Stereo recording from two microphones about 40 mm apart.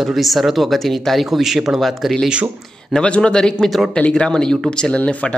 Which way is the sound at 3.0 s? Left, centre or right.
Left.